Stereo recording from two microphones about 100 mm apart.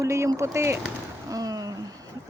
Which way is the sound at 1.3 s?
40° right (ahead or behind).